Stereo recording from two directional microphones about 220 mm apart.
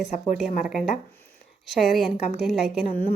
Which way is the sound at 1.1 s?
10° left (ahead or behind).